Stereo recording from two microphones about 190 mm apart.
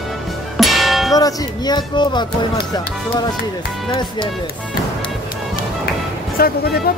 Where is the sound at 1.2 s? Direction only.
20° left (ahead or behind).